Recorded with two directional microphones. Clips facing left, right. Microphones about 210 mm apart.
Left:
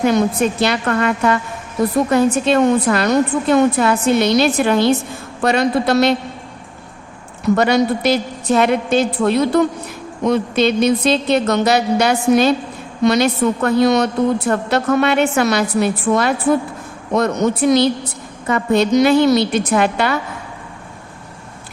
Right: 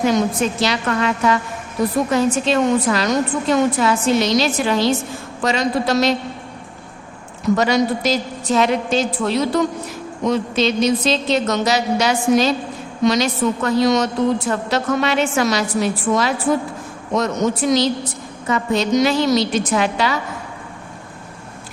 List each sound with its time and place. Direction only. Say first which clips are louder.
0.0 s a woman's voice: left 2 dB; 55° left (ahead or behind)
7.5 s a woman's voice: left 2 dB; 60° left (ahead or behind)